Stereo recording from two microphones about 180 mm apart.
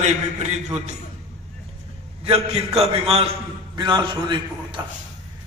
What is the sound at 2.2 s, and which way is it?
A man's voice, 35° right (ahead or behind).